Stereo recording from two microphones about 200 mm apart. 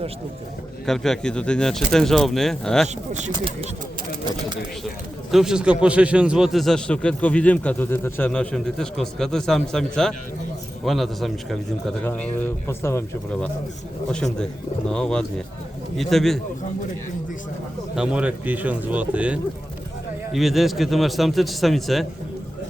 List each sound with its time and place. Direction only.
0.9 s a man's voice: centre (ahead or behind)
3.1 s speech: 35° right (ahead or behind)
5.3 s a man's voice: centre (ahead or behind)
17.9 s a man's voice: 5° right (ahead or behind)